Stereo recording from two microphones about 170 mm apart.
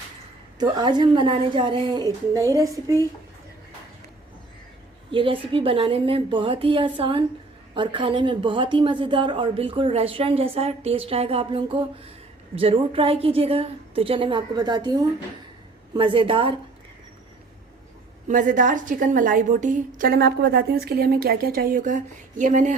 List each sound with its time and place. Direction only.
0.6 s a woman's voice: 25° right (ahead or behind)
5.1 s a woman's voice: 30° right (ahead or behind)
18.3 s a woman's voice: 50° right (ahead or behind)